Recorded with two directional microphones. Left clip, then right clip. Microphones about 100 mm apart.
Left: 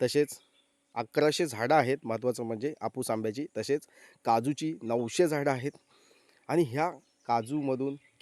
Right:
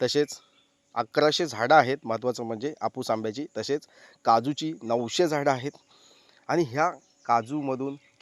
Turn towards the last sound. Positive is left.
turn(degrees=30)  # may be behind; listen again after turning